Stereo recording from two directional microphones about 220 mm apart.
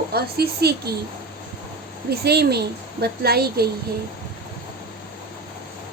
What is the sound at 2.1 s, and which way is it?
A woman's voice, 45° right (ahead or behind).